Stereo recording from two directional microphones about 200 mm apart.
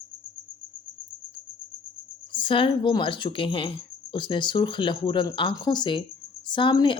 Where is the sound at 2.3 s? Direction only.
25° left (ahead or behind).